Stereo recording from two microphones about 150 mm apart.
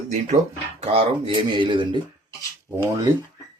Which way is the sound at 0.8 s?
40° right (ahead or behind).